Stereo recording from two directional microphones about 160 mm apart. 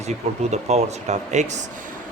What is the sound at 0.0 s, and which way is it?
Speech, 45° right (ahead or behind).